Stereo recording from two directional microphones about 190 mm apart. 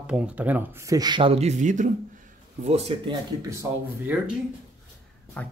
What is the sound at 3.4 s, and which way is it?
Speech, 15° right (ahead or behind).